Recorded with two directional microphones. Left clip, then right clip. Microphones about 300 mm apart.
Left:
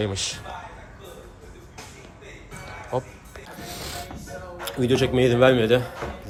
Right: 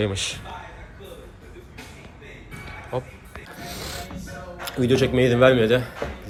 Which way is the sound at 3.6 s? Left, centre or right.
Centre.